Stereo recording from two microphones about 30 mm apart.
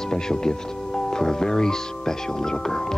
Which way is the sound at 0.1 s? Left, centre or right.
Left.